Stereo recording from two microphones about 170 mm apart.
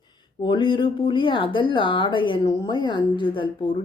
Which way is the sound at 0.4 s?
30° left (ahead or behind).